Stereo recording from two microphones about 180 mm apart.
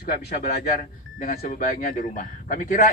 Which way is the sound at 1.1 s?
50° left (ahead or behind).